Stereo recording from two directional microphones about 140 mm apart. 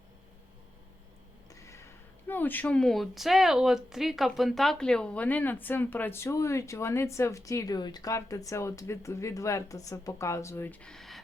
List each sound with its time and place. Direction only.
1.5 s speech: 20° left (ahead or behind); by 11.2 s centre (ahead or behind)